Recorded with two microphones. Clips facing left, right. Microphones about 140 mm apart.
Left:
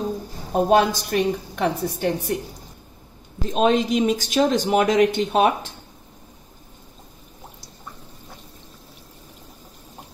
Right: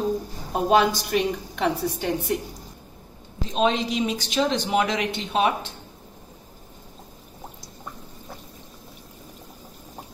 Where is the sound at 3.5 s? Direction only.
50° left (ahead or behind).